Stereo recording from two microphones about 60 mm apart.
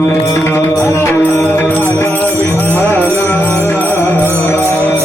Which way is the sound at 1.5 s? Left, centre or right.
Left.